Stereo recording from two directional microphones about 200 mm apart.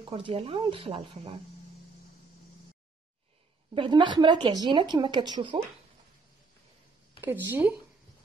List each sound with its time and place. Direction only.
0.1 s a woman's voice: 25° right (ahead or behind)
3.7 s a woman's voice: 25° right (ahead or behind)
7.2 s speech: 10° right (ahead or behind)